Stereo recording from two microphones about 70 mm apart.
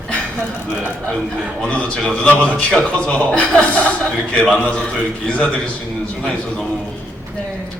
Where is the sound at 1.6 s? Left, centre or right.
Centre.